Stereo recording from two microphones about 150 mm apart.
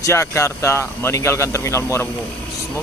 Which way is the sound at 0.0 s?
20° left (ahead or behind).